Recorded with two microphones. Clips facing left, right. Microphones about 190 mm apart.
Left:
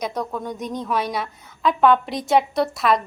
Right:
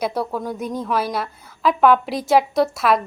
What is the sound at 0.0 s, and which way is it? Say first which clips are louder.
A woman's voice: right 3 dB; 5° right (ahead or behind).